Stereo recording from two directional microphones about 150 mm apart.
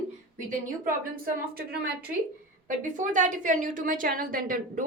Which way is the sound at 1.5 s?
90° right.